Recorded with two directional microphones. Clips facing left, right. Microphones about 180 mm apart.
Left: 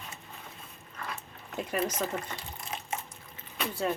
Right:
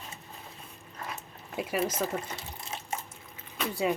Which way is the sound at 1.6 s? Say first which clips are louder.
Right 1 dB; 10° right (ahead or behind).